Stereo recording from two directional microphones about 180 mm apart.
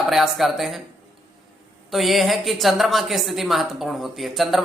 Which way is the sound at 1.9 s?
Centre (ahead or behind).